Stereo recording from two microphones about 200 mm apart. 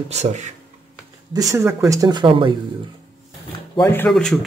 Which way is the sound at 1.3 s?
15° right (ahead or behind).